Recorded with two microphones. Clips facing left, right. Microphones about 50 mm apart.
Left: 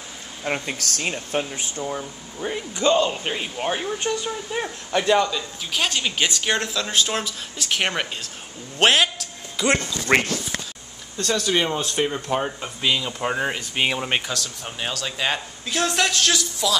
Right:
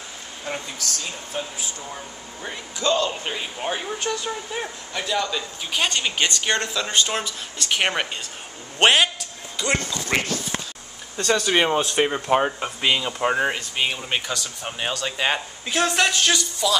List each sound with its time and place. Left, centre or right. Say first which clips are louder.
0.5 s speech: left 4 dB; left
1.8 s a man's voice: left 6 dB; centre
8.7 s a sound: right 1 dB; centre
10.1 s speech: left 5 dB; left
11.1 s a man's voice: right 2 dB; centre
11.5 s speech: right 4 dB; right; by 13.6 s centre
13.8 s speech: left 3 dB; left
14.2 s a man's voice: right 1 dB; centre